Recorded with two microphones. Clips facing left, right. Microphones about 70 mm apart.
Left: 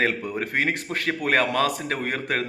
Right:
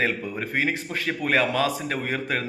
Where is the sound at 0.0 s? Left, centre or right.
Left.